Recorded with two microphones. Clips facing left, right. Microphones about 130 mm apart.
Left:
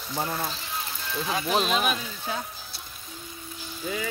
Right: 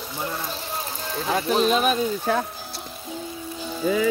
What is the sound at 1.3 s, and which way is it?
Speech, 40° right (ahead or behind).